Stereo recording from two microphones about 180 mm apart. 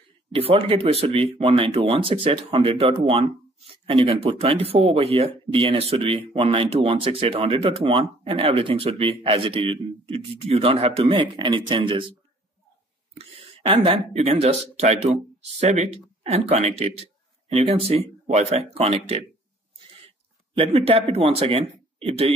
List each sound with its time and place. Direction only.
0.4 s speech: 30° right (ahead or behind)
13.1 s speech: 30° right (ahead or behind)
20.5 s speech: 30° right (ahead or behind)